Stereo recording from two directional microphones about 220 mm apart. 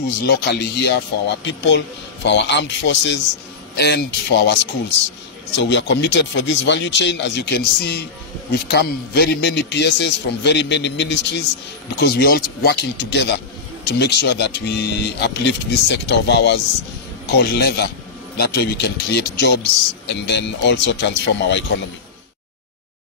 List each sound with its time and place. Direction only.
0.2 s a man's voice: 50° left (ahead or behind)
5.6 s a man's voice: 55° left (ahead or behind)